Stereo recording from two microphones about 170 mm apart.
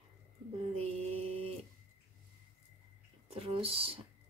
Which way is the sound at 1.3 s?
35° right (ahead or behind).